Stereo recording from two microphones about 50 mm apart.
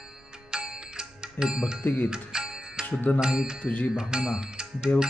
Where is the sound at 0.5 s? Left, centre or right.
Centre.